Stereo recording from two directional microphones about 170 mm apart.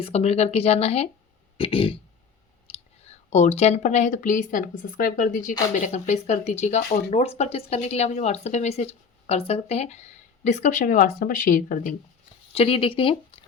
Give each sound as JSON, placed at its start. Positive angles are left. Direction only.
{"t": 0.0, "sound": "speech", "side_deg": 40}
{"t": 3.0, "sound": "speech", "side_deg": 40}
{"t": 12.5, "sound": "speech", "side_deg": 35}